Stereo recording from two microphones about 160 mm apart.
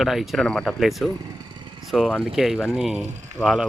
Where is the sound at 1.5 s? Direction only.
30° right (ahead or behind).